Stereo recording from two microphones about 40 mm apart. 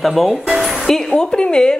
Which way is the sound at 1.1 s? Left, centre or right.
Left.